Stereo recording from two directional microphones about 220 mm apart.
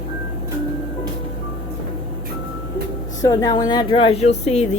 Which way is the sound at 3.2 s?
15° left (ahead or behind).